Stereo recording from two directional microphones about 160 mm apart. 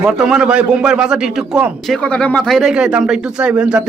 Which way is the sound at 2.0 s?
5° left (ahead or behind).